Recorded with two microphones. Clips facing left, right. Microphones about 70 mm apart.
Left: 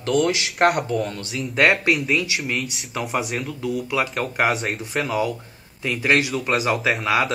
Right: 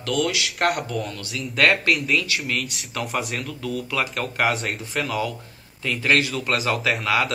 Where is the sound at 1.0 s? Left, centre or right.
Left.